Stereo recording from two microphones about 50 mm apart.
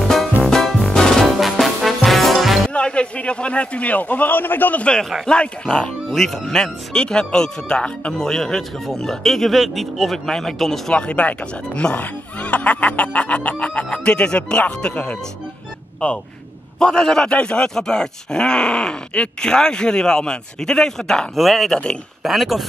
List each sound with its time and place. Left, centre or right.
0.5 s music: centre
2.7 s speech: left
5.2 s speech: centre
6.1 s speech: centre
10.9 s speech: left
16.8 s speech: centre